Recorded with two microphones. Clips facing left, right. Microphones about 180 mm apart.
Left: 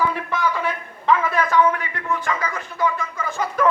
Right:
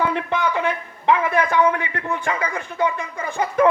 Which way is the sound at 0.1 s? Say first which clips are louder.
Right 3 dB; 65° right (ahead or behind).